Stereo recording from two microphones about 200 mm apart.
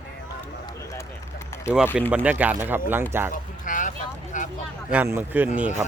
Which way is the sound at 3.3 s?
40° left (ahead or behind).